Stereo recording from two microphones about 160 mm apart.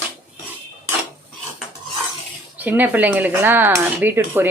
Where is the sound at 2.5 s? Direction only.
10° right (ahead or behind).